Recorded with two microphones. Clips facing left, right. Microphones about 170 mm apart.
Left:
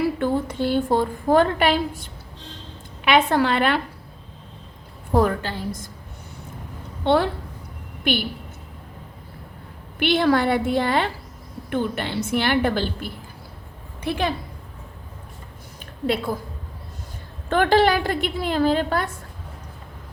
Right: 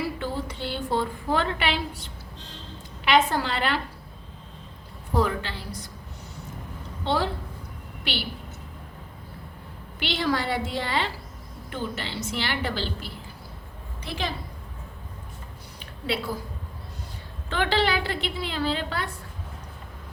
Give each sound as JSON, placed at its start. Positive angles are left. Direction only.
{"t": 0.2, "sound": "a woman's voice", "side_deg": 50}
{"t": 3.0, "sound": "a woman's voice", "side_deg": 60}
{"t": 5.1, "sound": "a woman's voice", "side_deg": 50}
{"t": 7.0, "sound": "a woman's voice", "side_deg": 60}
{"t": 10.0, "sound": "a woman's voice", "side_deg": 55}
{"t": 16.0, "sound": "a woman's voice", "side_deg": 50}
{"t": 17.5, "sound": "a woman's voice", "side_deg": 50}